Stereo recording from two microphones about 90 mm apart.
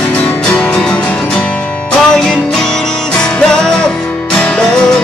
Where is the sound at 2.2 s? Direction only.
5° left (ahead or behind).